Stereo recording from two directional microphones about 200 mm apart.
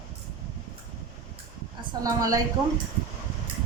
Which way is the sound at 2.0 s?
15° right (ahead or behind).